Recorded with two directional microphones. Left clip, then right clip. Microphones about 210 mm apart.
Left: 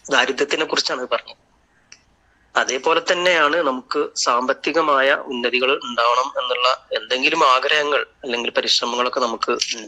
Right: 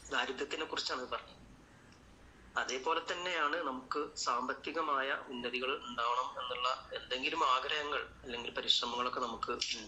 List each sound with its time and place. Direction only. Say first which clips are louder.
0.1 s a man's voice: left 19 dB; 45° left (ahead or behind)
2.5 s a man's voice: left 17 dB; 45° left (ahead or behind)